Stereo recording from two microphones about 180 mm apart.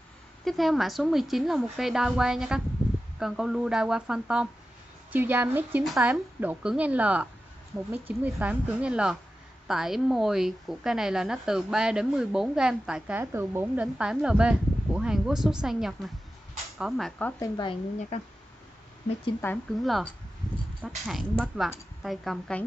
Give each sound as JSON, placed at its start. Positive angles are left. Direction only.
{"t": 0.5, "sound": "a woman's voice", "side_deg": 0}
{"t": 17.4, "sound": "speech", "side_deg": 25}
{"t": 19.4, "sound": "speech", "side_deg": 15}
{"t": 19.8, "sound": "speech", "side_deg": 0}